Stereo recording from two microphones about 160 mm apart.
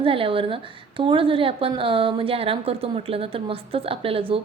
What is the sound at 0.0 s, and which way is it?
Speech, 35° right (ahead or behind).